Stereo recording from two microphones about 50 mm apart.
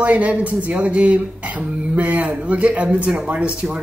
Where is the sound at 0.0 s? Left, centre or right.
Right.